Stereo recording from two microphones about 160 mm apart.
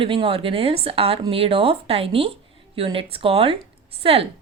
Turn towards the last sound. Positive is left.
turn(degrees=-35)  # may be behind; listen again after turning